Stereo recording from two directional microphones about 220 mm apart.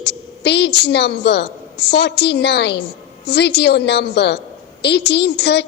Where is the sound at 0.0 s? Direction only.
50° left (ahead or behind).